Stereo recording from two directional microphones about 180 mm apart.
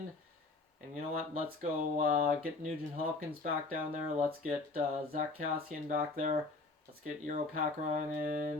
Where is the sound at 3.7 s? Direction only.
45° right (ahead or behind).